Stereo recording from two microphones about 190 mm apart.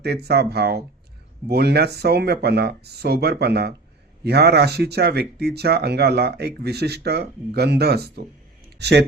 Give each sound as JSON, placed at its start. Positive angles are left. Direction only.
{"t": 0.0, "sound": "speech", "side_deg": -60}